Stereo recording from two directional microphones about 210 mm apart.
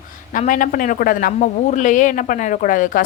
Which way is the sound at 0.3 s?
40° left (ahead or behind).